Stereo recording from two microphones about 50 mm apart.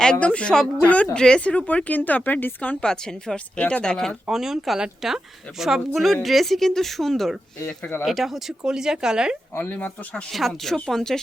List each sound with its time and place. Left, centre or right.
0.2 s a woman's voice: left
1.4 s speech: left
2.8 s a woman's voice: centre
3.3 s speech: left
4.3 s speech: centre
9.6 s speech: left
10.3 s a woman's voice: centre